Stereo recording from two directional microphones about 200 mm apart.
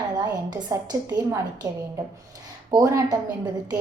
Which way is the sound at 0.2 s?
20° right (ahead or behind).